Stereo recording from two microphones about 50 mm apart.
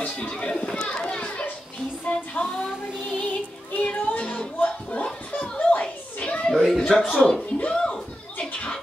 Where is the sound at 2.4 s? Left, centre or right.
Centre.